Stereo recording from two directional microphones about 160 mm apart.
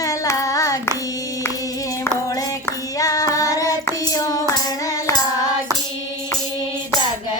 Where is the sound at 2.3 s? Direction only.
20° left (ahead or behind).